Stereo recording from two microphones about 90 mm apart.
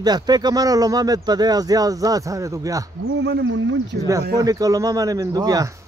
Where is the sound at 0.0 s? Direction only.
50° right (ahead or behind).